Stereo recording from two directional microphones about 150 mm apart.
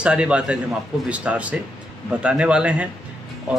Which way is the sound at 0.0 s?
5° right (ahead or behind).